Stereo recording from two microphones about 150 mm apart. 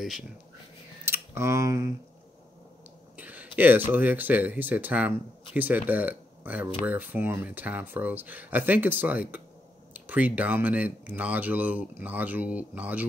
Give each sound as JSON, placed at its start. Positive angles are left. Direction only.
{"t": 1.0, "sound": "speech", "side_deg": -15}
{"t": 3.2, "sound": "a sound", "side_deg": -10}
{"t": 3.5, "sound": "speech", "side_deg": -10}